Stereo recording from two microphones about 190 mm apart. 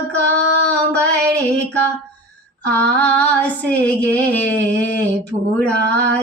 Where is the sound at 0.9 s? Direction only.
65° right (ahead or behind).